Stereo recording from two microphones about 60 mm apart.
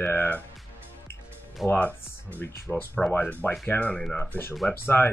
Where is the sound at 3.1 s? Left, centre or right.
Left.